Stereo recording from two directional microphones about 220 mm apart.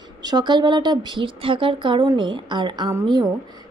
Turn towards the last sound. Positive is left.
turn(degrees=-20)  # may be behind; listen again after turning